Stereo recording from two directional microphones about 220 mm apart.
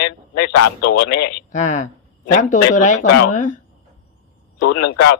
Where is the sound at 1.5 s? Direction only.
35° left (ahead or behind).